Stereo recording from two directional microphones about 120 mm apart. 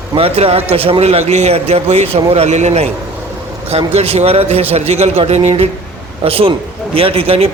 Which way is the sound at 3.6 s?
55° right (ahead or behind).